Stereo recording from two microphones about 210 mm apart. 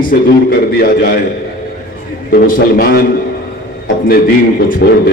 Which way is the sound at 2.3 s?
45° left (ahead or behind).